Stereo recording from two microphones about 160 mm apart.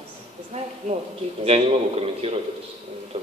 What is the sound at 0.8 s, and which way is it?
A man's voice, 45° right (ahead or behind).